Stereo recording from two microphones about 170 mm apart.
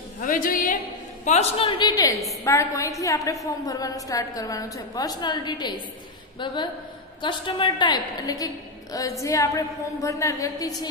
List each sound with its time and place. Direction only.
0.2 s a woman's voice: 55° left (ahead or behind)
1.2 s a woman's voice: 40° left (ahead or behind); by 10.9 s 20° left (ahead or behind)